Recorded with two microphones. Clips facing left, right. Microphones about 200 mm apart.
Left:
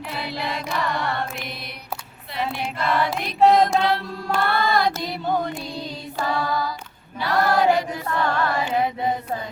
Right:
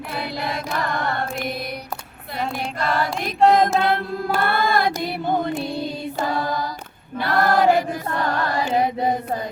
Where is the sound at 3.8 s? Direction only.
55° right (ahead or behind).